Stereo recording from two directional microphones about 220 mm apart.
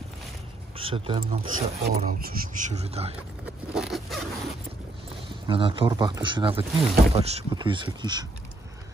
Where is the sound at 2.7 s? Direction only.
30° right (ahead or behind).